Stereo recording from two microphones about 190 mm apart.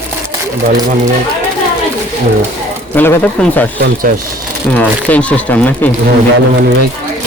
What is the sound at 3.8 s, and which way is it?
Speech, 60° right (ahead or behind).